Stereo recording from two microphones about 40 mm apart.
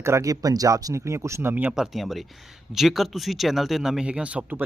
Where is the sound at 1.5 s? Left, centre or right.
Right.